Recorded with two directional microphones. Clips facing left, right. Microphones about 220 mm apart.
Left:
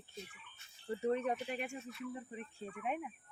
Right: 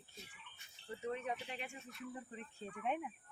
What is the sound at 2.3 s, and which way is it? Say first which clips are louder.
Speech: left 4 dB; 15° left (ahead or behind).